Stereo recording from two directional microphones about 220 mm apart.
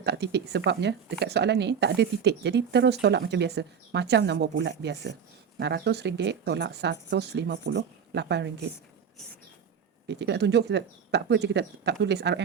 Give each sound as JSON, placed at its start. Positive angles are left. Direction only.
{"t": 0.0, "sound": "speech", "side_deg": -50}
{"t": 10.1, "sound": "speech", "side_deg": -50}